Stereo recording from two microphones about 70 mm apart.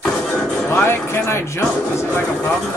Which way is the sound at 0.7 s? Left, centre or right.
Left.